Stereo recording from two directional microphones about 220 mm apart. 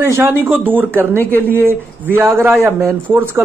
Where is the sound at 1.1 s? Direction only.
10° left (ahead or behind).